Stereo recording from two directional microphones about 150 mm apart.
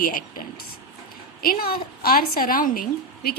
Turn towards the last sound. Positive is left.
turn(degrees=70)  # may be behind; listen again after turning